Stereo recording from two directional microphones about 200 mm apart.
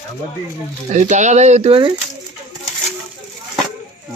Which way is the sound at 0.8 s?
35° right (ahead or behind).